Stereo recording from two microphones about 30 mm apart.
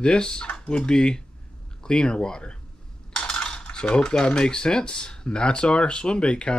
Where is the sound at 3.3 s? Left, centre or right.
Left.